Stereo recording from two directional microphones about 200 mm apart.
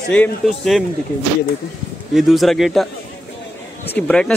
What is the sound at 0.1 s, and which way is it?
Speech, 5° left (ahead or behind).